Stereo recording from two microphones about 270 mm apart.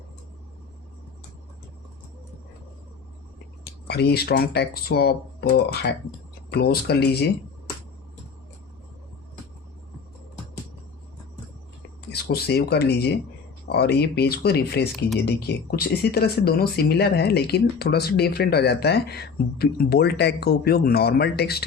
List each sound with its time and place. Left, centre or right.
3.6 s speech: left
12.3 s speech: left